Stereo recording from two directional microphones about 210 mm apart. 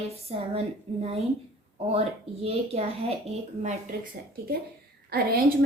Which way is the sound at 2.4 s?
30° right (ahead or behind).